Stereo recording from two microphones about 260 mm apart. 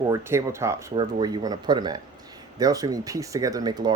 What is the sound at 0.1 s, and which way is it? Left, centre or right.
Speech, centre.